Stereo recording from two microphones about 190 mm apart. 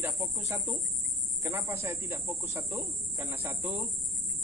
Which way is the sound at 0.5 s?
15° right (ahead or behind).